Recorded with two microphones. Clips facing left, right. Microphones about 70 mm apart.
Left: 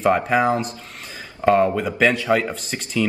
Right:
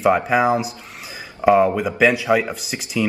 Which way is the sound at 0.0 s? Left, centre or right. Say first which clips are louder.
Right 1 dB; centre.